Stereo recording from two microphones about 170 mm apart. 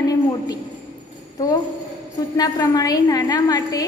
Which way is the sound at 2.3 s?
20° left (ahead or behind).